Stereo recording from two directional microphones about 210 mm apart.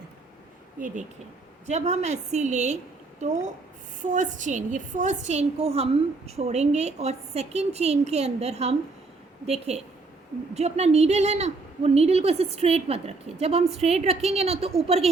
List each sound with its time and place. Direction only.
1.6 s a woman's voice: 35° right (ahead or behind)